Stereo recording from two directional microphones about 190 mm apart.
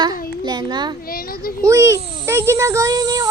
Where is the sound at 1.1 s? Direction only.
50° left (ahead or behind).